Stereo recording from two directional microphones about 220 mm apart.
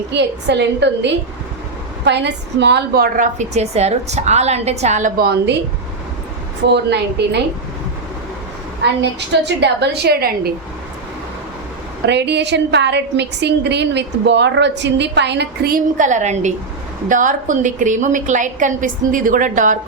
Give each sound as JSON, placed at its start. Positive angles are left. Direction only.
{"t": 0.1, "sound": "a woman's voice", "side_deg": -50}
{"t": 6.7, "sound": "a woman's voice", "side_deg": -50}
{"t": 8.8, "sound": "a woman's voice", "side_deg": -50}
{"t": 12.0, "sound": "a woman's voice", "side_deg": -50}